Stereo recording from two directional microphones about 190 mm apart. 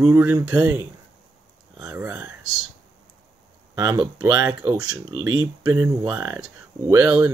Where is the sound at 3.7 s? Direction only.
15° right (ahead or behind).